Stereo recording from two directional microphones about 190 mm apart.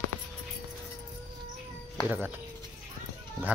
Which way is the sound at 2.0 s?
10° right (ahead or behind).